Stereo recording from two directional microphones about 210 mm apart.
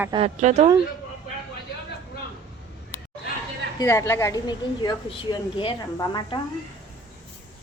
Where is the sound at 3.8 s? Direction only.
15° left (ahead or behind).